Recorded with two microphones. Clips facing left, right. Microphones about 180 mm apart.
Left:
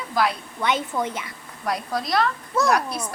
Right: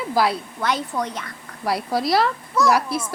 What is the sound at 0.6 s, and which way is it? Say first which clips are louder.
Speech: left 2 dB; centre (ahead or behind).